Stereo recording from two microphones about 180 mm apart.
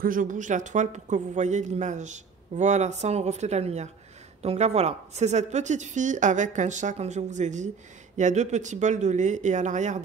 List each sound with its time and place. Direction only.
0.0 s speech: 50° right (ahead or behind)